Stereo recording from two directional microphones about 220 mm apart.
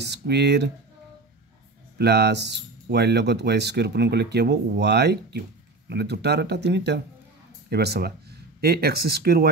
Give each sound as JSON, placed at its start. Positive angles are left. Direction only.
{"t": 0.0, "sound": "speech", "side_deg": -50}
{"t": 2.0, "sound": "speech", "side_deg": -50}